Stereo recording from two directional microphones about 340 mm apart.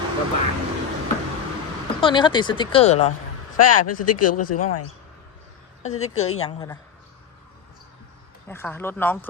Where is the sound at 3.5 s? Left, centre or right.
Left.